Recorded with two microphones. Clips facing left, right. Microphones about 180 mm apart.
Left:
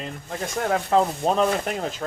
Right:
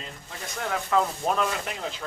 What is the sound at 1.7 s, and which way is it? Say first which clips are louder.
Speech: left 6 dB; 45° left (ahead or behind).